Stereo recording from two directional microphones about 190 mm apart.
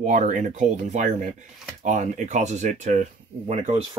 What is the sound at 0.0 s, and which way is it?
Speech, 40° right (ahead or behind).